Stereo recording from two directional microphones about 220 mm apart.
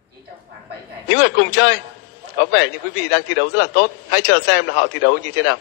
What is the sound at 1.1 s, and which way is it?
A man's voice, 50° left (ahead or behind).